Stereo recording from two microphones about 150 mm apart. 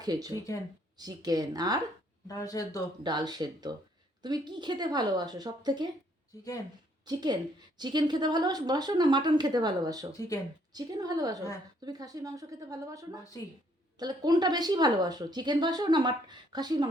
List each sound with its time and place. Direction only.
0.0 s a woman's voice: 25° right (ahead or behind)
2.2 s speech: 25° left (ahead or behind)
3.0 s a woman's voice: 30° right (ahead or behind)
7.0 s a woman's voice: 30° right (ahead or behind)
10.1 s speech: 25° left (ahead or behind)
10.8 s a woman's voice: 25° right (ahead or behind)